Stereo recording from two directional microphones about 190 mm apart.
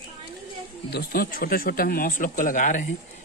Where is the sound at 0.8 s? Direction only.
55° left (ahead or behind).